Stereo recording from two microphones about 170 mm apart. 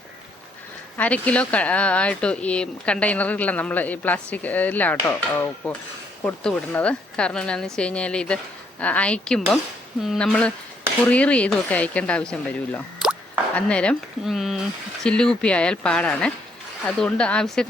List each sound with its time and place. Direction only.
0.9 s speech: 10° left (ahead or behind)